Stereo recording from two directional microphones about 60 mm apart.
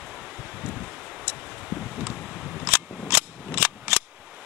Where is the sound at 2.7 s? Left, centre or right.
Right.